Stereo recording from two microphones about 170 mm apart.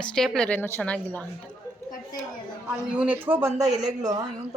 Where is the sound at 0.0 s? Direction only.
5° left (ahead or behind).